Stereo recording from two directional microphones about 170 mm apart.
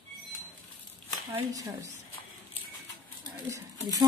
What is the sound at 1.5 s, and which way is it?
Speech, 20° right (ahead or behind).